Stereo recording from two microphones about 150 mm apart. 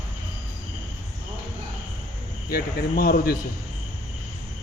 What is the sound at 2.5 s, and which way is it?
Speech, 85° left.